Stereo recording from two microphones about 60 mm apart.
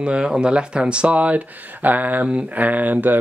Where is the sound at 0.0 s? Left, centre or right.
Centre.